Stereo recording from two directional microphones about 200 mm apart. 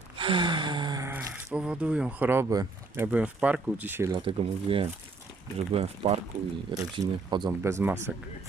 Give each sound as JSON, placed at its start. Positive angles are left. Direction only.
{"t": 0.2, "sound": "speech", "side_deg": -25}
{"t": 4.1, "sound": "speech", "side_deg": -25}